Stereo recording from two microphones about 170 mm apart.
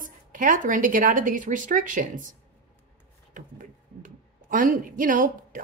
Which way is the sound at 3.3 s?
50° right (ahead or behind).